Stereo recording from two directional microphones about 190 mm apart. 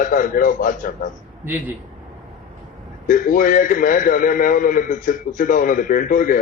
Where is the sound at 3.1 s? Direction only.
45° left (ahead or behind).